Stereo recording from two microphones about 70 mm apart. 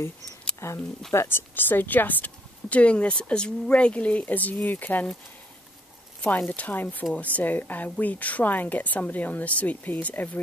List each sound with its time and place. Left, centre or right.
0.6 s speech: left
1.5 s speech: left
6.2 s speech: left